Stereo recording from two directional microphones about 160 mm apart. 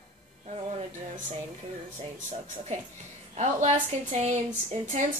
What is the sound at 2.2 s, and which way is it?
A woman's voice, 45° right (ahead or behind).